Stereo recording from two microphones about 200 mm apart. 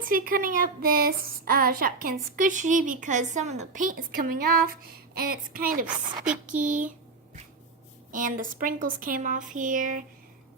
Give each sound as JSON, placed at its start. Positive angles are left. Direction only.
{"t": 0.0, "sound": "a woman's voice", "side_deg": -45}
{"t": 8.1, "sound": "a woman's voice", "side_deg": -45}